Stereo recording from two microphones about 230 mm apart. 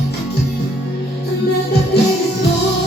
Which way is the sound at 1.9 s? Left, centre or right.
Left.